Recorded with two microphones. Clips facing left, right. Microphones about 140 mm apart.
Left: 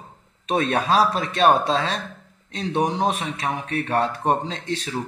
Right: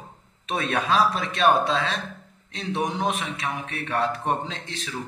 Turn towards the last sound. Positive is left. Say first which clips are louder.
# left 6 dB
turn(degrees=35)  # may be behind; listen again after turning